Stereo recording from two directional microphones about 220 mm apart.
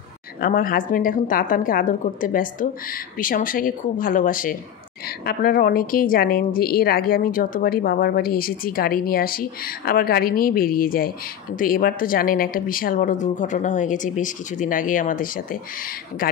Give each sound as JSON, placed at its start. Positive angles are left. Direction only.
{"t": 0.4, "sound": "a woman's voice", "side_deg": 40}